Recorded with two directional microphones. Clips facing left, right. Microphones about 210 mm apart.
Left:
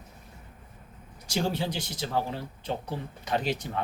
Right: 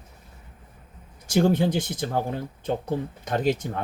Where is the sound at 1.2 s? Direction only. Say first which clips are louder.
Right 8 dB; 55° right (ahead or behind).